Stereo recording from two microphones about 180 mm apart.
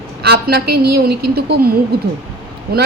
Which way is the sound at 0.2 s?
60° right (ahead or behind).